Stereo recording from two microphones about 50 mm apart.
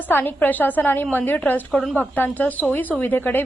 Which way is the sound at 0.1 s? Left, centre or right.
Left.